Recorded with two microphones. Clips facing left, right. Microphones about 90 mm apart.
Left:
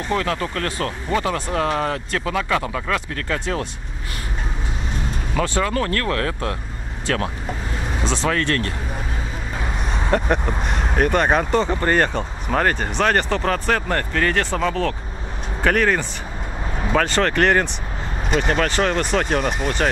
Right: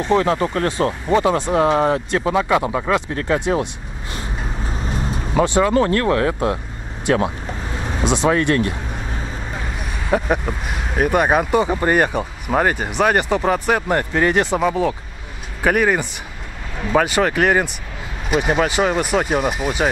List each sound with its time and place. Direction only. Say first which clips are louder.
0.0 s speech: right 6 dB; 20° right (ahead or behind)
5.3 s speech: right 6 dB; 20° right (ahead or behind)
10.0 s speech: right 1 dB; 5° right (ahead or behind)